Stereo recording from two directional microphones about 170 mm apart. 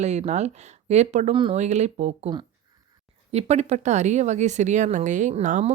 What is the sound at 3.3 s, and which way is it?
Speech, 40° right (ahead or behind).